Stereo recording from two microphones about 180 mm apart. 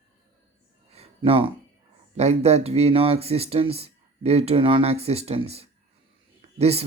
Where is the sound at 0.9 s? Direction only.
35° right (ahead or behind).